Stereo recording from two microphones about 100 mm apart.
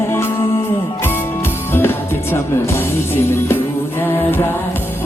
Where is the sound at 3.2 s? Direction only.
25° left (ahead or behind).